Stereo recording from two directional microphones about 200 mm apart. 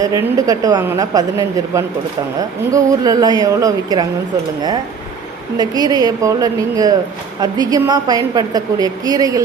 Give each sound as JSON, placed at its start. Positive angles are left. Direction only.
{"t": 0.0, "sound": "a woman's voice", "side_deg": -15}
{"t": 5.5, "sound": "a woman's voice", "side_deg": -20}